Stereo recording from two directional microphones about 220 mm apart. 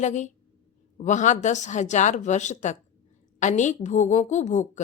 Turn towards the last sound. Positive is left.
turn(degrees=35)  # may be behind; listen again after turning